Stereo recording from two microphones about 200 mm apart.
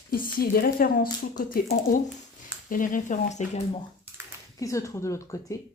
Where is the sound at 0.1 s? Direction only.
45° left (ahead or behind).